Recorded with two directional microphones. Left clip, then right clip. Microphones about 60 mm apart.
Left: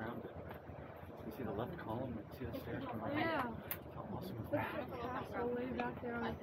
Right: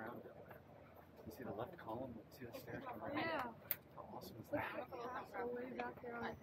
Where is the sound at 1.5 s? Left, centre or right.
Right.